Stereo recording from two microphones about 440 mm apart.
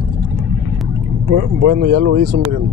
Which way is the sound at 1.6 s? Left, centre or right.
Right.